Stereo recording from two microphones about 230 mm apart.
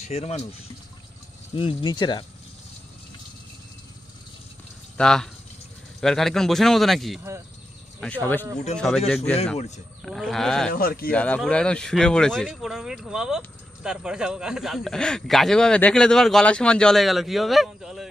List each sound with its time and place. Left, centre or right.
0.1 s speech: left
1.5 s speech: left
4.9 s speech: centre
10.7 s speech: left
11.1 s speech: centre